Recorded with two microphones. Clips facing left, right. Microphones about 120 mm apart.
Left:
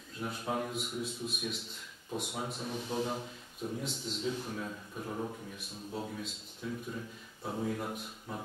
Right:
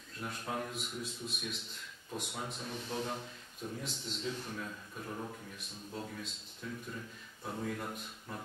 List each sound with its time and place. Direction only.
0.2 s a man's voice: 5° left (ahead or behind)